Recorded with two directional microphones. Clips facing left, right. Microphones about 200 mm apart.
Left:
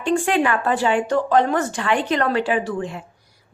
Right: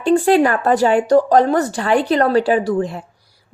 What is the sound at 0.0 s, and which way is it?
A woman's voice, 35° right (ahead or behind).